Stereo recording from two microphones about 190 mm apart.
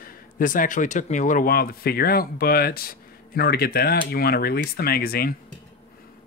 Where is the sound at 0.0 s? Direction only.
45° left (ahead or behind).